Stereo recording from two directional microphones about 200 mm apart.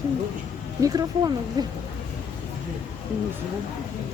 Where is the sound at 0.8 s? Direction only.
20° right (ahead or behind).